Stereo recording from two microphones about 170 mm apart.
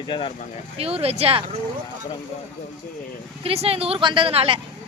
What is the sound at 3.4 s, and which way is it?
A woman's voice, 35° right (ahead or behind).